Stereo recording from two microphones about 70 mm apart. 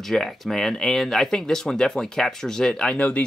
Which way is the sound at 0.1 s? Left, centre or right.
Centre.